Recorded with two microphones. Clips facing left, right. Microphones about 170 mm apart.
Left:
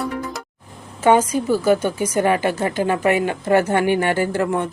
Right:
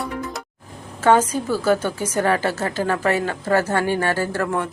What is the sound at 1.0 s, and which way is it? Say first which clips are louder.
A woman's voice: left 1 dB; 10° left (ahead or behind).